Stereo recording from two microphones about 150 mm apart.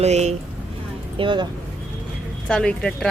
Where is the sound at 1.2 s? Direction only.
35° right (ahead or behind).